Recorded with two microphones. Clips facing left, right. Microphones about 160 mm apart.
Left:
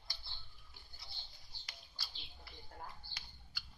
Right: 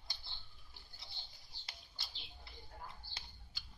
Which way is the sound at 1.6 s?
25° right (ahead or behind).